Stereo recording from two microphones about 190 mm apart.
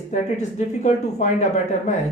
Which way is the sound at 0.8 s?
40° left (ahead or behind).